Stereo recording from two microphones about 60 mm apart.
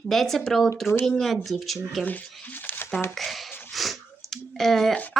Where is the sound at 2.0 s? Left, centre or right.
Left.